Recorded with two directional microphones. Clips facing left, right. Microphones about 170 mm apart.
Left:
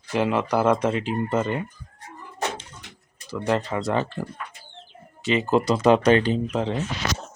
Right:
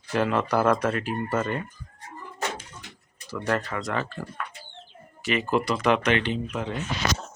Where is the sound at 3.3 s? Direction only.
20° left (ahead or behind).